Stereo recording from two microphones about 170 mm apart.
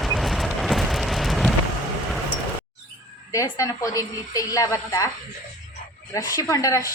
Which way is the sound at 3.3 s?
20° left (ahead or behind).